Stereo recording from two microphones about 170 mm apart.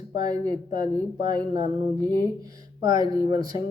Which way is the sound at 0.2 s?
25° right (ahead or behind).